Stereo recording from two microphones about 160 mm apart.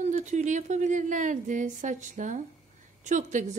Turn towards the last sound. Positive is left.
turn(degrees=-50)  # may be behind; listen again after turning